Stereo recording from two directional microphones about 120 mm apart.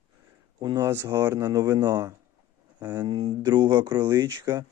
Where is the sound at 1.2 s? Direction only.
30° right (ahead or behind).